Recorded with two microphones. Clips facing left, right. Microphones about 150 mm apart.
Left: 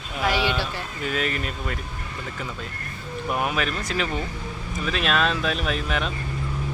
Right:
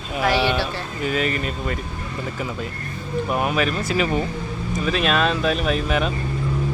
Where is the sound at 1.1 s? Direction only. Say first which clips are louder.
Right 4 dB; centre (ahead or behind).